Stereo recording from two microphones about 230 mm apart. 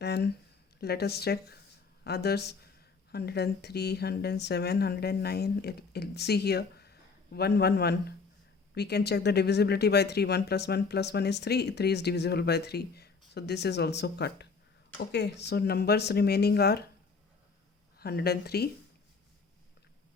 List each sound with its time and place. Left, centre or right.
0.0 s a sound: left
0.8 s speech: left
18.0 s speech: left